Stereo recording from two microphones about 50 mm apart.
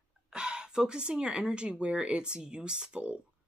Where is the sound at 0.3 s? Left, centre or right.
Centre.